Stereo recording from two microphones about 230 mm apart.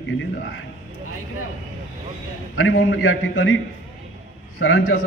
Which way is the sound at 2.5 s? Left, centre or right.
Left.